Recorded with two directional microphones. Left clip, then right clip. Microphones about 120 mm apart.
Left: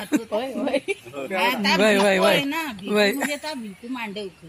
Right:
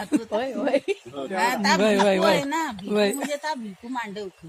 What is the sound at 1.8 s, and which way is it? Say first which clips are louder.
Speech: left 3 dB; 15° left (ahead or behind).